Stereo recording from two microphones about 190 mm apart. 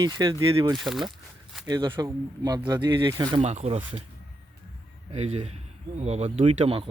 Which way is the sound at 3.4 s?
35° right (ahead or behind).